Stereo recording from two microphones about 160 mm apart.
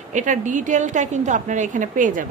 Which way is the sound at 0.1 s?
50° right (ahead or behind).